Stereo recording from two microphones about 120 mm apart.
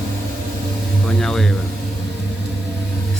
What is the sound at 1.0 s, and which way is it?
Speech, 5° left (ahead or behind).